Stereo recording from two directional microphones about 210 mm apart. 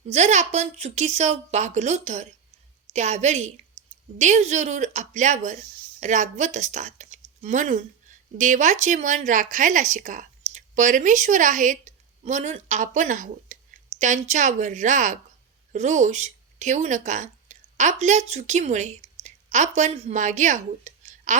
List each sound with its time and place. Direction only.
0.1 s a woman's voice: 35° right (ahead or behind)